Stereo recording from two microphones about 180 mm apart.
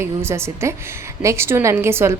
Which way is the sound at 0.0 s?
15° right (ahead or behind).